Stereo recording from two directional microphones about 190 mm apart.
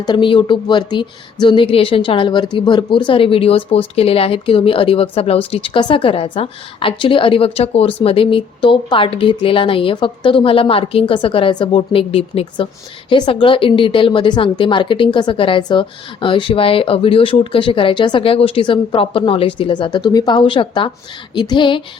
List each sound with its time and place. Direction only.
0.0 s a woman's voice: 25° left (ahead or behind)